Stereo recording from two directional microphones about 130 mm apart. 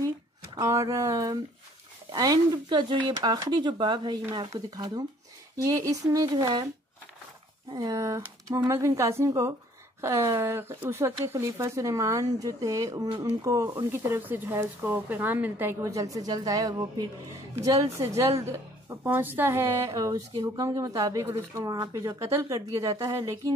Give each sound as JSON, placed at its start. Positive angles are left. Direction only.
{"t": 0.6, "sound": "speech", "side_deg": -25}
{"t": 7.7, "sound": "speech", "side_deg": -30}